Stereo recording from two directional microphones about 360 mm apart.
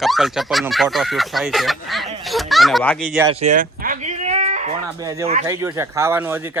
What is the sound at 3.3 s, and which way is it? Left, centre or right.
Sheep, centre.